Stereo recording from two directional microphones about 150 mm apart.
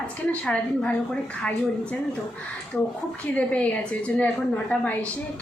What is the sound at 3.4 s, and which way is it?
A woman's voice, 10° left (ahead or behind).